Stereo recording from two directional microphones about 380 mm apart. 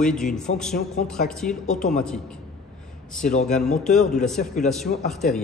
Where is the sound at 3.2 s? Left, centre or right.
Centre.